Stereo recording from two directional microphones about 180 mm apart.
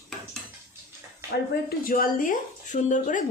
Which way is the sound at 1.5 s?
55° left (ahead or behind).